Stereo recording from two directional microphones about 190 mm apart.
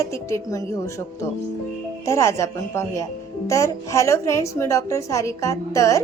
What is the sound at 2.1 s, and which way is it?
A woman's voice, 15° left (ahead or behind).